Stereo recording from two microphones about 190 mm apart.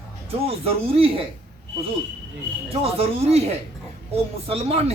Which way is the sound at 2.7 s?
30° right (ahead or behind).